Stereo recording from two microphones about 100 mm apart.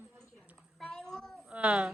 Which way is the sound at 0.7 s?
5° left (ahead or behind).